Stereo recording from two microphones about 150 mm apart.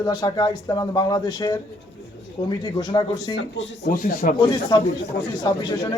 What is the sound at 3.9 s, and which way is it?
Speech, 70° left (ahead or behind).